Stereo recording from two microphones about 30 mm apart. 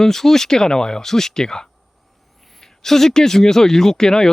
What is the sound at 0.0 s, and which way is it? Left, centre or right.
Speech, centre.